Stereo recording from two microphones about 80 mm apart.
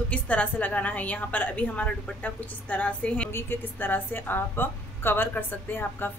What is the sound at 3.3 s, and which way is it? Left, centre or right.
A woman's voice, left.